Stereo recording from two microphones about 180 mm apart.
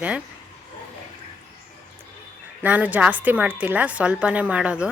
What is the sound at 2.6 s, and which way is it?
A woman's voice, 10° right (ahead or behind).